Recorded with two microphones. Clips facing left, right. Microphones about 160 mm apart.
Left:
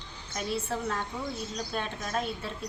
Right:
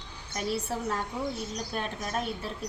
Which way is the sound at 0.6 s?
10° right (ahead or behind).